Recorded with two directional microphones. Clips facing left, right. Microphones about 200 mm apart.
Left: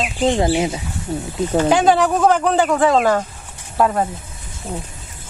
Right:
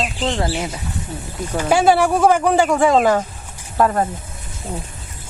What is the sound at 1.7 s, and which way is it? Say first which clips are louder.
Speech: right 3 dB; 10° right (ahead or behind).